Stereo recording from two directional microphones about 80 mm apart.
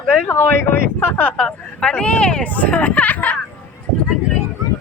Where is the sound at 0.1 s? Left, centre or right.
Left.